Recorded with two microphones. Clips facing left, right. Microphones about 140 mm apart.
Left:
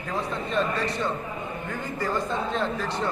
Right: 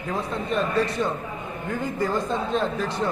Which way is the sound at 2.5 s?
15° right (ahead or behind).